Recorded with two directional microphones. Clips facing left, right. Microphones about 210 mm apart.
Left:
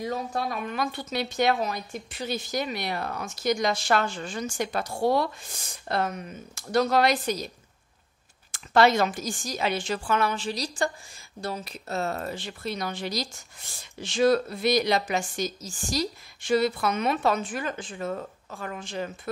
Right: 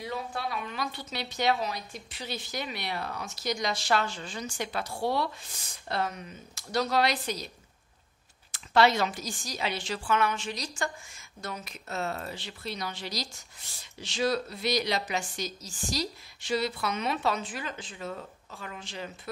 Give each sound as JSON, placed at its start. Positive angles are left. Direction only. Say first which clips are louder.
{"t": 0.0, "sound": "a woman's voice", "louder": "left 5 dB", "side_deg": 45}
{"t": 8.5, "sound": "a woman's voice", "louder": "left 3 dB", "side_deg": 50}